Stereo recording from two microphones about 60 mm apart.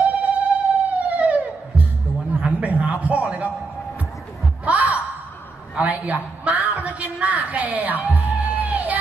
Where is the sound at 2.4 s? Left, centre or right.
Right.